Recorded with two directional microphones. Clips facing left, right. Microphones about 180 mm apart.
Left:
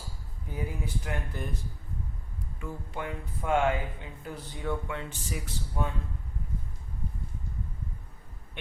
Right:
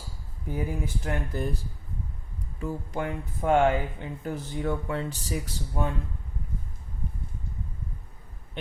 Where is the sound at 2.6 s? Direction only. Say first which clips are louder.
Right 6 dB; 45° right (ahead or behind).